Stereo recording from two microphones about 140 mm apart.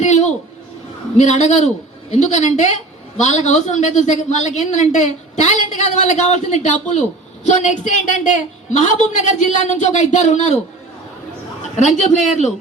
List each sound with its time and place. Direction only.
0.0 s a man's voice: 55° left (ahead or behind)
11.8 s a man's voice: 55° left (ahead or behind)